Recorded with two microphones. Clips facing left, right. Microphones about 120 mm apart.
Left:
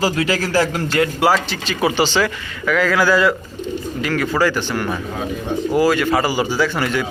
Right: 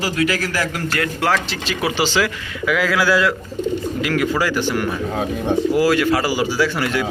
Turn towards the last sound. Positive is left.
turn(degrees=0)  # may be behind; listen again after turning